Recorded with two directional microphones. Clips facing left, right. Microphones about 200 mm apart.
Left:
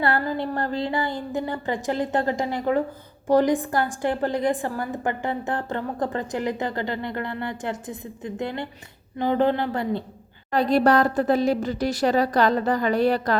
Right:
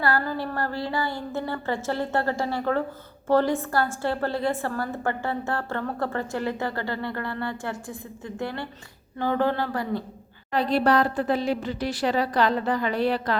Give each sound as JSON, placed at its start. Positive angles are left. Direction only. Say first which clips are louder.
{"t": 0.0, "sound": "a woman's voice", "louder": "left 2 dB", "side_deg": 20}
{"t": 10.5, "sound": "a woman's voice", "louder": "left 3 dB", "side_deg": 45}